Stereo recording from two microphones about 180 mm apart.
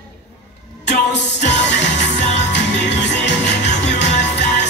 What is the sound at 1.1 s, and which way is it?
Music, 75° left (ahead or behind).